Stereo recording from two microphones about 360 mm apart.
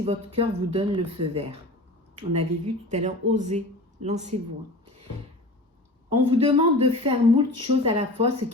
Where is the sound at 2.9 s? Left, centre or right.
Centre.